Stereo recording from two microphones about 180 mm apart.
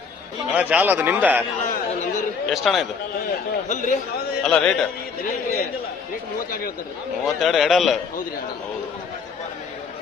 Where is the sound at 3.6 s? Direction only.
45° left (ahead or behind).